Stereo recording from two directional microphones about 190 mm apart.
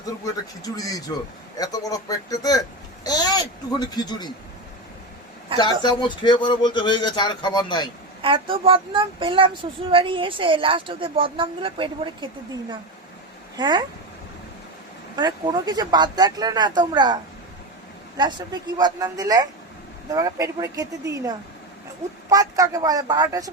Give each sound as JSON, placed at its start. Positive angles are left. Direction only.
{"t": 0.6, "sound": "a child's voice", "side_deg": 20}
{"t": 5.5, "sound": "a child's voice", "side_deg": 20}
{"t": 8.2, "sound": "a woman's voice", "side_deg": -30}
{"t": 13.6, "sound": "a woman's voice", "side_deg": -25}
{"t": 15.1, "sound": "a woman's voice", "side_deg": -20}
{"t": 18.2, "sound": "a woman's voice", "side_deg": -20}